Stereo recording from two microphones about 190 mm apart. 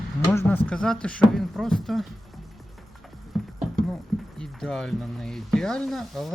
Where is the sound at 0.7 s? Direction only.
5° left (ahead or behind).